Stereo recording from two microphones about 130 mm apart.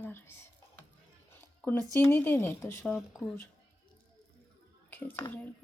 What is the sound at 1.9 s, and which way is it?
Speech, 20° left (ahead or behind).